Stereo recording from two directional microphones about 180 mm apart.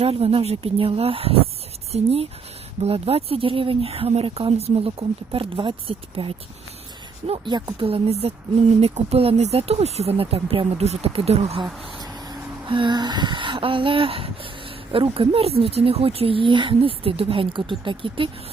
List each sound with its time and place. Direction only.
0.0 s a woman's voice: 35° right (ahead or behind)
12.3 s a sound: 25° right (ahead or behind)
14.9 s a woman's voice: 30° right (ahead or behind)